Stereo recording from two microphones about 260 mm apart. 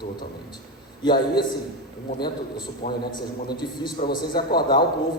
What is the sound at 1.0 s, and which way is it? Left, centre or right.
A woman's voice, centre.